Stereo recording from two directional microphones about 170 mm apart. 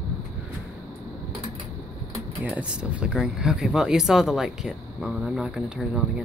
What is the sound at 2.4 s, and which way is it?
Speech, 5° right (ahead or behind).